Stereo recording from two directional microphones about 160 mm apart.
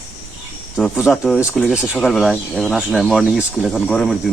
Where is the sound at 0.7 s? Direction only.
Centre (ahead or behind).